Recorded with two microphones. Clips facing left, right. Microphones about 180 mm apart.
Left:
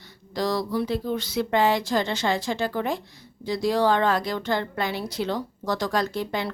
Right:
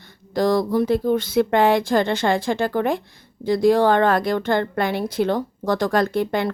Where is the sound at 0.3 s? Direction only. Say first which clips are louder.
Right 7 dB; 50° right (ahead or behind).